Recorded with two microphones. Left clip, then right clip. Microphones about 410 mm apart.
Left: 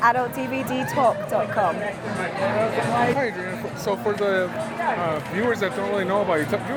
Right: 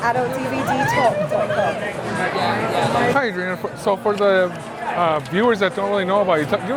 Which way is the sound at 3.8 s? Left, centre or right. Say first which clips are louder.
Right 6 dB; right.